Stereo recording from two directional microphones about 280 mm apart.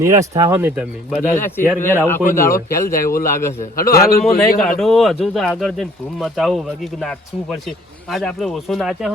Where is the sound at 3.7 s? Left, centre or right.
Left.